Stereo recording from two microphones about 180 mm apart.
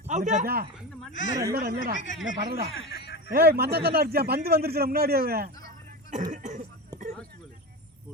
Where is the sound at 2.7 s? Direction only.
75° left (ahead or behind).